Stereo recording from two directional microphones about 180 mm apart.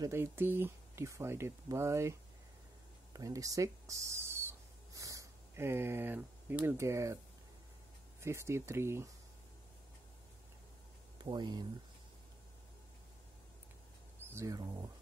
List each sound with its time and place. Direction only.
0.0 s speech: 15° right (ahead or behind)
3.1 s a sound: 20° right (ahead or behind)
8.2 s speech: 15° right (ahead or behind)
11.2 s speech: 25° right (ahead or behind)
14.3 s speech: 20° right (ahead or behind)